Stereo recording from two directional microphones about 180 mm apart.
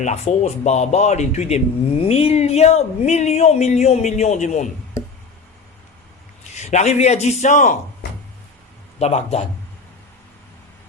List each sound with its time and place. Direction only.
0.0 s speech: 40° left (ahead or behind)
6.6 s speech: 40° left (ahead or behind)
9.0 s speech: 35° left (ahead or behind)